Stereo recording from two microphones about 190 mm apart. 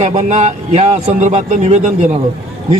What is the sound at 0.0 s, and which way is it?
Speech, 40° right (ahead or behind).